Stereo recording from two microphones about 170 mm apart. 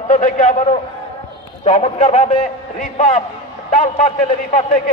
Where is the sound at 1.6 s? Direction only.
40° left (ahead or behind).